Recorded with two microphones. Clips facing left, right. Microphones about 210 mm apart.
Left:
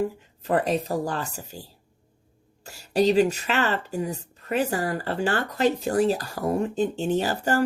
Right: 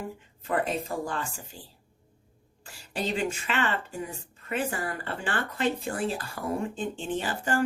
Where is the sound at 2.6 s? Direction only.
40° left (ahead or behind).